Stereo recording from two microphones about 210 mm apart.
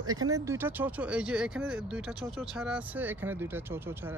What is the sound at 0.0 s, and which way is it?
Speech, 20° right (ahead or behind).